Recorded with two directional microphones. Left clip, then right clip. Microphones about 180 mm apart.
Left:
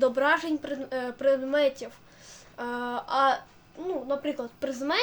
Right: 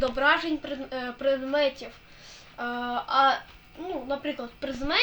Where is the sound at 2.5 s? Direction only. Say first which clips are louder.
Right 2 dB; 30° left (ahead or behind).